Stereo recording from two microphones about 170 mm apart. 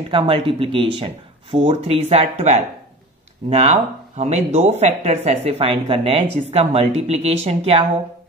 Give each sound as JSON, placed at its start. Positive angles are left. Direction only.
{"t": 0.1, "sound": "speech", "side_deg": -30}